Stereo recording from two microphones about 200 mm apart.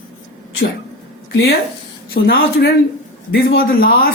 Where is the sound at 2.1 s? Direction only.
50° left (ahead or behind).